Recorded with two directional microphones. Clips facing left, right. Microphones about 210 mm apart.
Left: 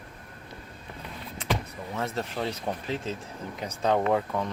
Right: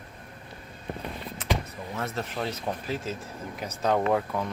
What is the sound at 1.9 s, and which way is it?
Speech, centre (ahead or behind).